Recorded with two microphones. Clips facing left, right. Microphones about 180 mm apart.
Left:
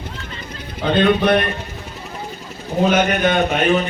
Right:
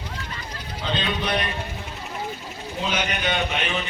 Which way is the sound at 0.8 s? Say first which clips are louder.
Left 12 dB; 55° left (ahead or behind).